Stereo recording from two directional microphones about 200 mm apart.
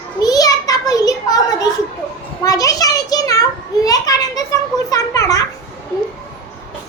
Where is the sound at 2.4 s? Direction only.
15° left (ahead or behind).